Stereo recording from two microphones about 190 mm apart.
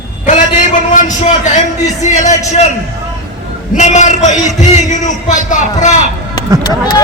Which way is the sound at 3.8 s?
40° left (ahead or behind).